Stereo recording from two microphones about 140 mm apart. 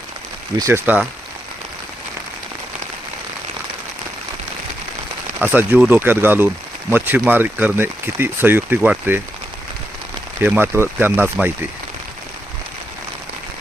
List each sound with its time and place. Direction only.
0.5 s speech: 25° right (ahead or behind)
5.4 s speech: 15° right (ahead or behind)
10.4 s speech: 15° right (ahead or behind)